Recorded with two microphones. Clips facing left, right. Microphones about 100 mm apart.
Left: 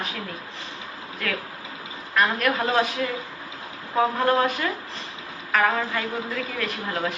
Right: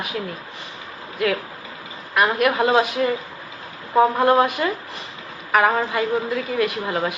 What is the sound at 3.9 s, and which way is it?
A woman's voice, 15° right (ahead or behind).